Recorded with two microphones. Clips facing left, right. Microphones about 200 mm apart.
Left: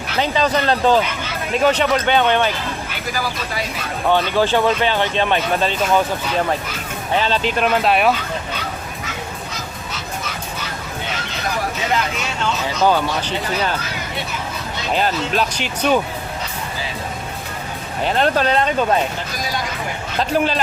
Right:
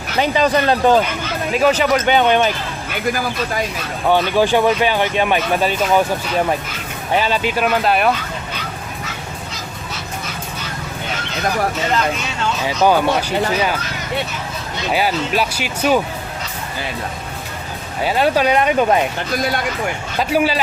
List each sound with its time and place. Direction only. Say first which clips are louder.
0.2 s speech: right 3 dB; 15° right (ahead or behind)
4.1 s speech: right 2 dB; 15° right (ahead or behind)
7.2 s speech: right 1 dB; 10° right (ahead or behind)
12.6 s speech: right 3 dB; 15° right (ahead or behind)
14.9 s speech: right 1 dB; 10° right (ahead or behind)
18.0 s speech: right 2 dB; 5° right (ahead or behind)
20.1 s speech: right 1 dB; 5° right (ahead or behind)